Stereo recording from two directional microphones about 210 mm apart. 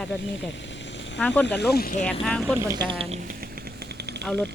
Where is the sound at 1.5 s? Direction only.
50° left (ahead or behind).